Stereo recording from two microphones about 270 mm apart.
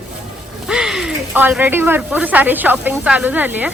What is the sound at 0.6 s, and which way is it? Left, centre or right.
Speech, centre.